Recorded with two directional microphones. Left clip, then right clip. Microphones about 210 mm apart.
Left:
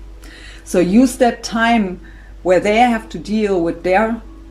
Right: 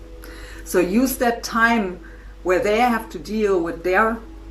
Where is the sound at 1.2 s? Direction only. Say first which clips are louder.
Left 3 dB; 30° left (ahead or behind).